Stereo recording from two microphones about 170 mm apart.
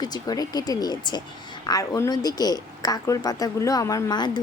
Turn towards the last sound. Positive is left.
turn(degrees=25)  # may be behind; listen again after turning